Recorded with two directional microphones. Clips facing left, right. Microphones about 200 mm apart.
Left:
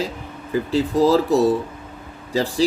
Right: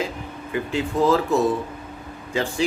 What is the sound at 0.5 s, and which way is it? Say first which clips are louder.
Speech: left 5 dB; 35° left (ahead or behind).